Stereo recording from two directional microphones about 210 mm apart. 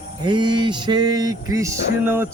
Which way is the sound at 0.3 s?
20° right (ahead or behind).